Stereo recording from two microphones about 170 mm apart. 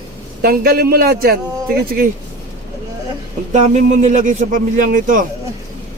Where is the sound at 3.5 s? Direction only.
45° right (ahead or behind).